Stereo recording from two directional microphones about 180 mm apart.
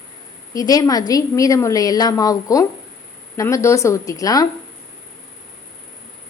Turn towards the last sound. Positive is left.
turn(degrees=20)  # may be behind; listen again after turning